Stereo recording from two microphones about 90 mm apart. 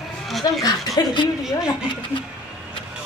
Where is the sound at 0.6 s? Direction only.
55° left (ahead or behind).